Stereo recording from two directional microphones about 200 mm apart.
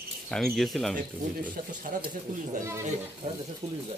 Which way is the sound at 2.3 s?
45° right (ahead or behind).